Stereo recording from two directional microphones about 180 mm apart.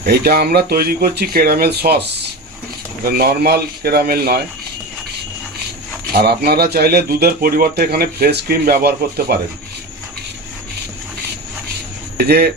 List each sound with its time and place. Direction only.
0.0 s a man's voice: 60° right (ahead or behind)
6.1 s a man's voice: 60° right (ahead or behind)
12.1 s speech: 60° right (ahead or behind)